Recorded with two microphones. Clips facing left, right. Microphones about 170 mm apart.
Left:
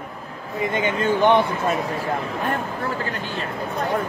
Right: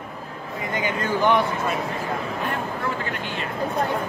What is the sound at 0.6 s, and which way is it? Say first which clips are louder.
Speech: left 5 dB; 25° left (ahead or behind).